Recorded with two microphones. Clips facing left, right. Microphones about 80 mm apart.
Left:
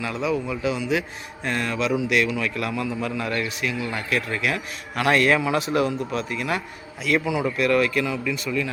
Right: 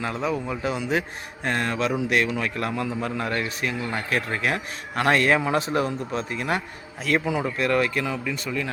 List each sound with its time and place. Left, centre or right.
0.0 s a man's voice: right